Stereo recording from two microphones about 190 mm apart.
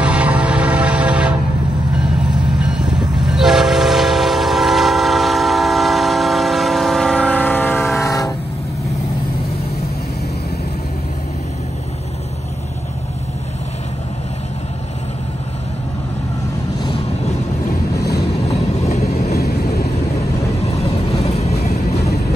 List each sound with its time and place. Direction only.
0.0 s music: 5° right (ahead or behind)
2.6 s train: 5° right (ahead or behind)
8.0 s train: 15° left (ahead or behind)
18.5 s vehicle: 35° left (ahead or behind)
19.3 s vehicle: 55° left (ahead or behind)
20.7 s vehicle: 35° left (ahead or behind)